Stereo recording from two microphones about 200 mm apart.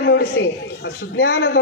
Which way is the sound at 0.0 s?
55° left (ahead or behind).